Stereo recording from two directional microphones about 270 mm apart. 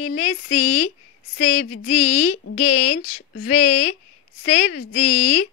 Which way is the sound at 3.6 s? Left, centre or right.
Left.